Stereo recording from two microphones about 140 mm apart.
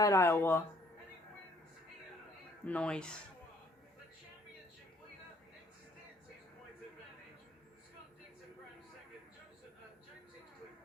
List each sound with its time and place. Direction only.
0.0 s speech: 20° left (ahead or behind)
2.6 s speech: 10° left (ahead or behind)